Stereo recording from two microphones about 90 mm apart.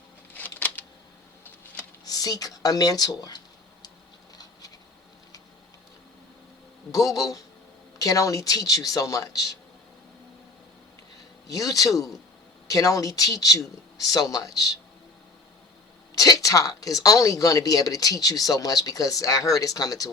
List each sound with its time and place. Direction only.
0.3 s a sound: 20° left (ahead or behind)
2.0 s speech: 45° left (ahead or behind)
6.9 s a woman's voice: 40° left (ahead or behind)
11.4 s a woman's voice: 40° left (ahead or behind)
16.1 s a woman's voice: 40° left (ahead or behind)